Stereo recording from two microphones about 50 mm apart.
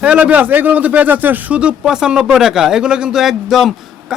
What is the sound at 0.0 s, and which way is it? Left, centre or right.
Speech, right.